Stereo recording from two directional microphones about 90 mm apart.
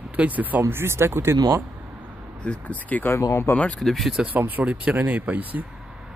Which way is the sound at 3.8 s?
Centre (ahead or behind).